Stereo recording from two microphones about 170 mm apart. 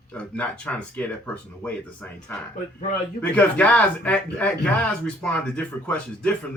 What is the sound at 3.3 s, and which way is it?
Speech, 10° left (ahead or behind).